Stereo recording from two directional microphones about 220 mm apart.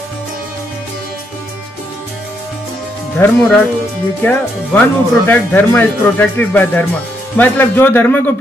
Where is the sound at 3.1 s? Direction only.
5° left (ahead or behind).